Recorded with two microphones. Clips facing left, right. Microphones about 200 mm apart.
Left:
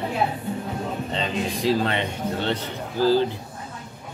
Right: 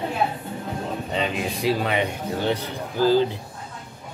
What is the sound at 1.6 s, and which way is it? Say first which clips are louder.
Speech: even; 10° right (ahead or behind).